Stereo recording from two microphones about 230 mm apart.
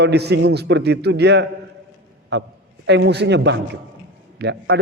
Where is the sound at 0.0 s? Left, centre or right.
Right.